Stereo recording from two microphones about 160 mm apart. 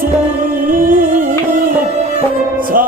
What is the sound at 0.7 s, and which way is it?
Music, 60° right (ahead or behind).